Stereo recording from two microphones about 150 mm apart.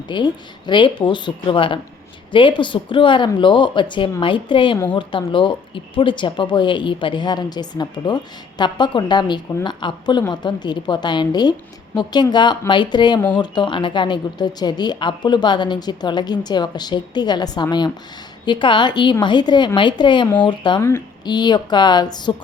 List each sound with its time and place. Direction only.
0.1 s speech: 30° left (ahead or behind)